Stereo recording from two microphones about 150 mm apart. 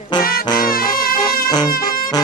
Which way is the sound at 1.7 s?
75° left (ahead or behind).